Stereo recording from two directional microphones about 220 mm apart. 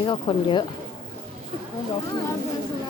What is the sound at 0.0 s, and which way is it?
Speech, 20° left (ahead or behind).